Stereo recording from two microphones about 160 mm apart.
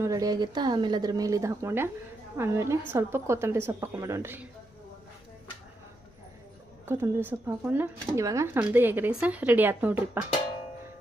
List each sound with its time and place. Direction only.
0.0 s a woman's voice: 20° right (ahead or behind)
6.8 s speech: 15° right (ahead or behind)